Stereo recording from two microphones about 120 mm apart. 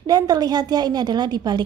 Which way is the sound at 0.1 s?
35° right (ahead or behind).